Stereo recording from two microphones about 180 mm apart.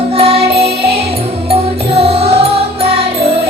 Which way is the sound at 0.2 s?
35° right (ahead or behind).